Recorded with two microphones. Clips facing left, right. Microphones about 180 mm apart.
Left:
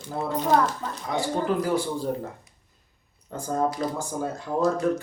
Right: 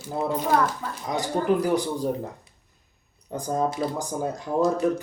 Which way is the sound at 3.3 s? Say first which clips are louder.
Even; 15° right (ahead or behind).